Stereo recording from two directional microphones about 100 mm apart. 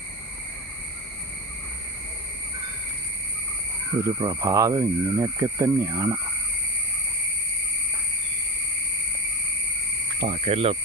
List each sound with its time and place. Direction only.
4.0 s speech: 40° right (ahead or behind)
10.2 s speech: 85° right